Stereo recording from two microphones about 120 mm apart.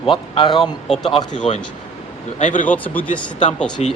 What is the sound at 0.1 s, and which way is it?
Speech, 40° left (ahead or behind).